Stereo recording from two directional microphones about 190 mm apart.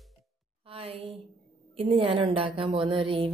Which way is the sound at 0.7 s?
30° right (ahead or behind).